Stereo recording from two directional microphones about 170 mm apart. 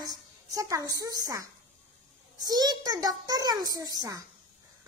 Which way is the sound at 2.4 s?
25° right (ahead or behind).